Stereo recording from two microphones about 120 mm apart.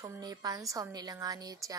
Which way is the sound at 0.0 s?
30° right (ahead or behind).